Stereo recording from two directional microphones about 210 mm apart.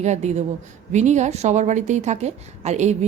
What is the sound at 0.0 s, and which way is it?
A woman's voice, 35° right (ahead or behind).